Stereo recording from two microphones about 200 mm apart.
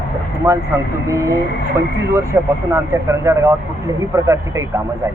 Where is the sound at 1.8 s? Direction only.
15° right (ahead or behind).